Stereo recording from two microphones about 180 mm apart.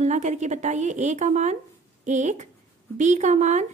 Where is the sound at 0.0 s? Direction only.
40° right (ahead or behind).